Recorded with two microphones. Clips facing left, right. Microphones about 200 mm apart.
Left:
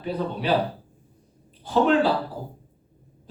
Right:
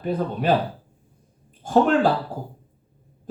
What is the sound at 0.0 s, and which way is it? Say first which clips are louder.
Speech: right 3 dB; 50° right (ahead or behind).